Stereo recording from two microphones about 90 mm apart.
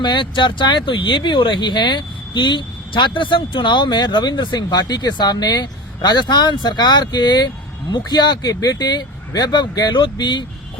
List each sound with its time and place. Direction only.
0.0 s speech: 60° left (ahead or behind)